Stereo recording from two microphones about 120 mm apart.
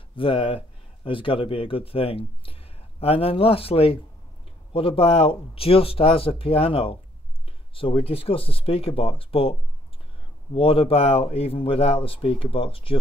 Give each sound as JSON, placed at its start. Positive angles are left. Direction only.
{"t": 0.1, "sound": "speech", "side_deg": 45}